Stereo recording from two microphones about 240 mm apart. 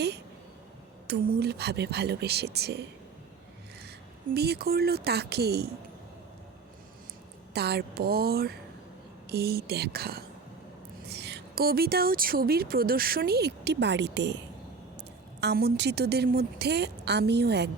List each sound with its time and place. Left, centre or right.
1.0 s a woman's voice: right
4.4 s speech: right
7.5 s speech: right
15.4 s a woman's voice: right